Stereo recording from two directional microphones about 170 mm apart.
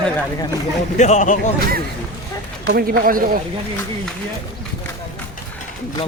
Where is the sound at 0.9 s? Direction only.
45° left (ahead or behind).